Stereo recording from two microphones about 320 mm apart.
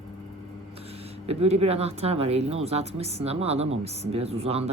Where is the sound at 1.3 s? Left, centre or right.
Centre.